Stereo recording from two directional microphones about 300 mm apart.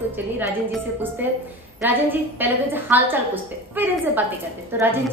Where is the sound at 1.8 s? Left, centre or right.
Centre.